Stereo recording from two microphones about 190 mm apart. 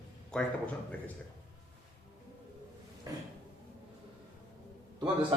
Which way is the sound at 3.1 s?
15° right (ahead or behind).